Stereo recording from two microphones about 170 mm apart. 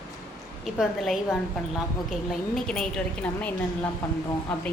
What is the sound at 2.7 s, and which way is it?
Speech, 5° left (ahead or behind).